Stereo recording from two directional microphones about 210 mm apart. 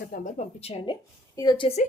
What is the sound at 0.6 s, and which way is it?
A woman's voice, 25° left (ahead or behind).